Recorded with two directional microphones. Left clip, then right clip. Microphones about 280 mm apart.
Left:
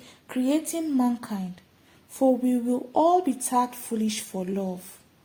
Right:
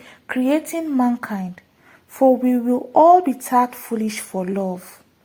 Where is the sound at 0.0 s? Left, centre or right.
Centre.